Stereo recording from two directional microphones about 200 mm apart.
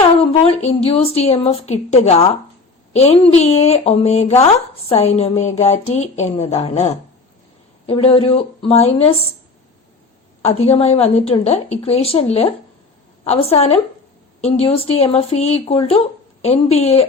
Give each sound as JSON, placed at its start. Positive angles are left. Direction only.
{"t": 0.4, "sound": "a woman's voice", "side_deg": 30}
{"t": 10.4, "sound": "speech", "side_deg": 30}